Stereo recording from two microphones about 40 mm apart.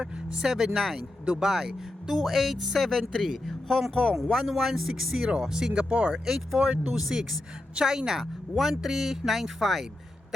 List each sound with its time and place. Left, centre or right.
0.3 s speech: centre
2.2 s speech: centre
5.9 s speech: right
6.2 s speech: centre